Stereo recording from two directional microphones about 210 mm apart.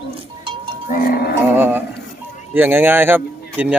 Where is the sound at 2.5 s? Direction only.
10° right (ahead or behind).